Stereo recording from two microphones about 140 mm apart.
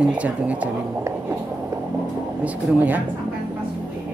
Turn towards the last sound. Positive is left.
turn(degrees=-10)  # may be behind; listen again after turning